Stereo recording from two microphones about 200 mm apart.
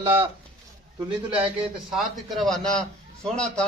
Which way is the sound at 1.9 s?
Centre (ahead or behind).